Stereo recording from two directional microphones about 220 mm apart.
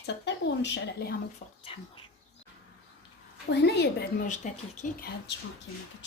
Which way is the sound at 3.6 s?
50° left (ahead or behind).